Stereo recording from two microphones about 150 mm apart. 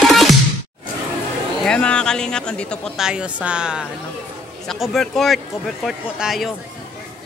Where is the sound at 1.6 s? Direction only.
5° left (ahead or behind).